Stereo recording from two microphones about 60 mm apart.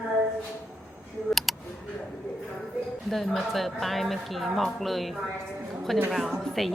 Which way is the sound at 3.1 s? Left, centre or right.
Centre.